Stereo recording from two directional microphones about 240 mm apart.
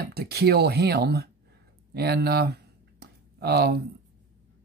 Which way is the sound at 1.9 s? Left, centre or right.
Right.